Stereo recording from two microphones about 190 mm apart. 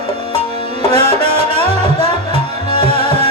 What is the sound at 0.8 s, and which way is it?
Music, 30° right (ahead or behind).